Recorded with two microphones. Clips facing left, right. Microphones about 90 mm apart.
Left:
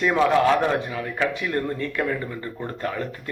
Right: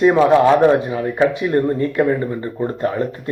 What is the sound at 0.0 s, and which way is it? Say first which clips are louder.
A man's voice: right 7 dB; 30° right (ahead or behind).